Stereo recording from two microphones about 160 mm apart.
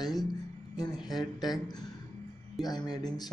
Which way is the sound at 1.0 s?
Centre (ahead or behind).